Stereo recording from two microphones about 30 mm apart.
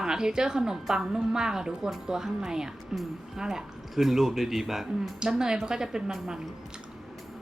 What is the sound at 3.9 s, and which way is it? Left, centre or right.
Speech, centre.